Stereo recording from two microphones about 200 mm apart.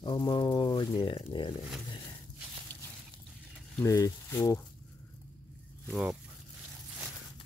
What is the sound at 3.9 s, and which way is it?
Speech, 15° left (ahead or behind).